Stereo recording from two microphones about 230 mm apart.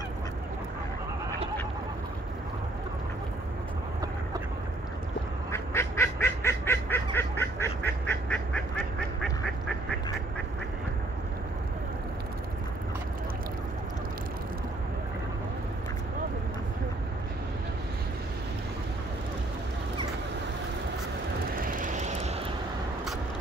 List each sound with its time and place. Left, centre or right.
5.5 s goose: centre
21.5 s vehicle: right